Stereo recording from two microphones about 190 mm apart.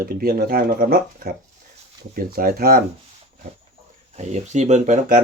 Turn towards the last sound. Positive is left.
turn(degrees=-45)  # may be behind; listen again after turning